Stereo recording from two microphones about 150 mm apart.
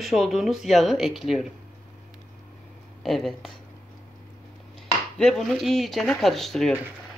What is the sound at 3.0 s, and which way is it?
Speech, centre (ahead or behind).